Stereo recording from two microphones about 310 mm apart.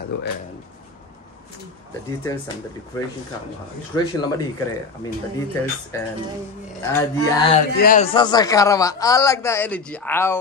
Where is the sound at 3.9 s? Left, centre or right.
Centre.